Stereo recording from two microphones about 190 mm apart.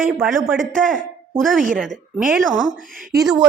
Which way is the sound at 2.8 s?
45° right (ahead or behind).